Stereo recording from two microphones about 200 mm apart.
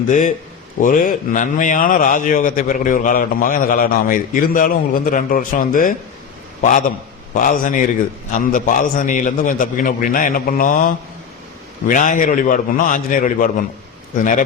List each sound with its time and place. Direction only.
0.1 s a man's voice: 40° left (ahead or behind)